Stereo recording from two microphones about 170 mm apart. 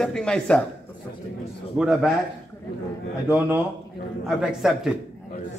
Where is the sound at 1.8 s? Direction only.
5° right (ahead or behind).